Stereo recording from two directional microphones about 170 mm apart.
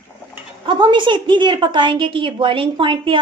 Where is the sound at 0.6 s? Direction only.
30° right (ahead or behind).